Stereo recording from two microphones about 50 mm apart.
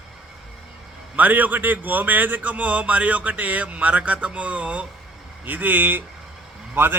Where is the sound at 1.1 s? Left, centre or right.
Right.